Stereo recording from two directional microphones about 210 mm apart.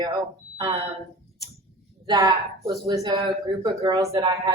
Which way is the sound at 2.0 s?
20° right (ahead or behind).